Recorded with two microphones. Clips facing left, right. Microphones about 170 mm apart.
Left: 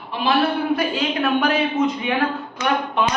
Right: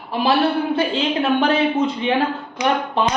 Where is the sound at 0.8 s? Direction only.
25° right (ahead or behind).